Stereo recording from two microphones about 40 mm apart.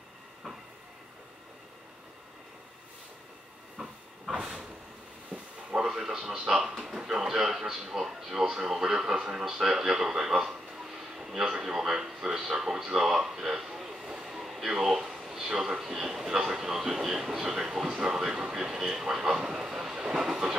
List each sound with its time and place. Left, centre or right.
3.7 s hiss: right
4.4 s vehicle: centre
5.9 s a man's voice: centre
14.0 s train: centre
14.4 s a sound: centre
15.1 s a man's voice: centre
20.2 s train: centre